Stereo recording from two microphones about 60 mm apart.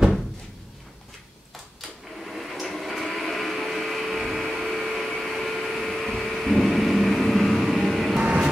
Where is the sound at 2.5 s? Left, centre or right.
Centre.